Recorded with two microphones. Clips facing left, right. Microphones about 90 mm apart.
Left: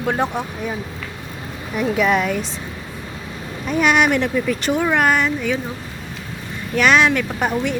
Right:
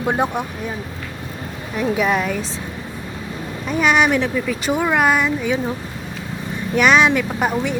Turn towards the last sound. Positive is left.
turn(degrees=-5)  # may be behind; listen again after turning